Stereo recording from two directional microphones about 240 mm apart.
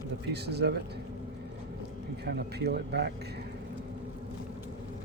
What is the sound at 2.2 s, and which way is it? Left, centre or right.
Speech, right.